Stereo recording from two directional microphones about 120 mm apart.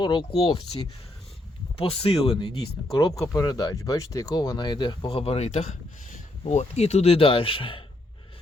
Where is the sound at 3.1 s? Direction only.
25° left (ahead or behind).